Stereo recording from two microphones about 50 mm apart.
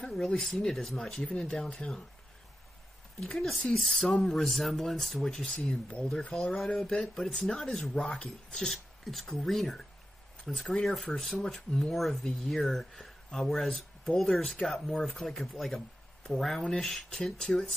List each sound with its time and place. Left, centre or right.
0.0 s speech: centre
1.3 s speech: left
3.3 s speech: centre
8.6 s speech: centre